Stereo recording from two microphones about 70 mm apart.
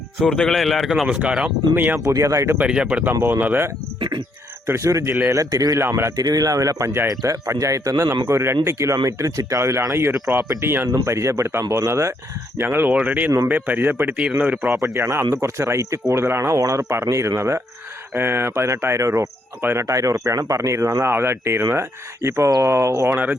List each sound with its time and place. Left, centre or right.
0.3 s speech: centre
1.7 s speech: right
2.0 s speech: right
2.6 s speech: centre; by 3.7 s right
4.6 s speech: right
5.0 s speech: right
5.3 s speech: right
8.3 s speech: right
12.5 s speech: right
14.9 s speech: right
22.4 s speech: right
22.7 s speech: right
23.0 s speech: right